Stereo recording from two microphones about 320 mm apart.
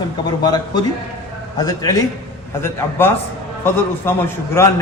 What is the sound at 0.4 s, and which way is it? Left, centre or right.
A man's voice, centre.